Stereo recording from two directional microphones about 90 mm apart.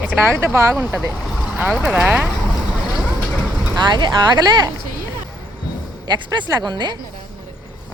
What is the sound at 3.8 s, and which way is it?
Speech, 55° right (ahead or behind).